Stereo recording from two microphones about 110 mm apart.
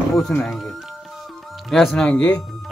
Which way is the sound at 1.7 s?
Centre (ahead or behind).